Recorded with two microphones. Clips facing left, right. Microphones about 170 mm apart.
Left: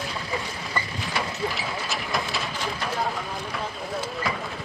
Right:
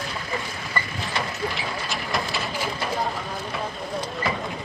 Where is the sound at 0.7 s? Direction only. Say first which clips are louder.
Right 1 dB; 5° left (ahead or behind).